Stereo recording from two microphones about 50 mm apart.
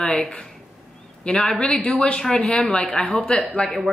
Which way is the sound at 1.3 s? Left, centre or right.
Left.